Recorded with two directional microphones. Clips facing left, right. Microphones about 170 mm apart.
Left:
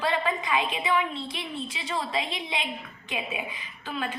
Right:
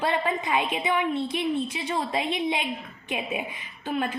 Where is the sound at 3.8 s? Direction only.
50° right (ahead or behind).